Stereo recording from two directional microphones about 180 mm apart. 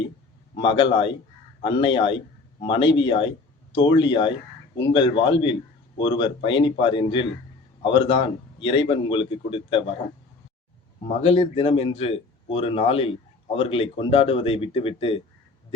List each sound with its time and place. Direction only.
0.5 s a man's voice: 30° left (ahead or behind)
11.2 s a man's voice: 35° left (ahead or behind)